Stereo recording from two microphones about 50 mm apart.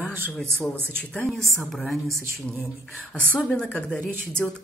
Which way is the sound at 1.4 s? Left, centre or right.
Centre.